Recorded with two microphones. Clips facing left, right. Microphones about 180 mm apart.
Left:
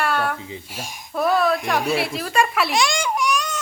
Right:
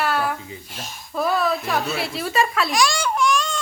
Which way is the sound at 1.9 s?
55° left (ahead or behind).